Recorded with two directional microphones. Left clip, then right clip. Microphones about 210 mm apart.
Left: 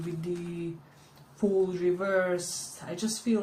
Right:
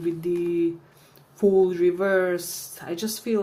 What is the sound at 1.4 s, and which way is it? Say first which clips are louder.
Speech: right 8 dB; 55° right (ahead or behind).